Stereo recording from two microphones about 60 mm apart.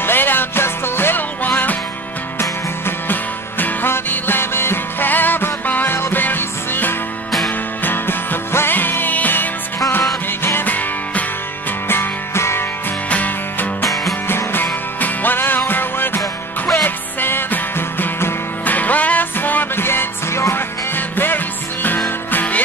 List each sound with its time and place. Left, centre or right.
0.0 s music: left
3.1 s music: left
11.9 s music: left
13.1 s music: left
14.2 s music: left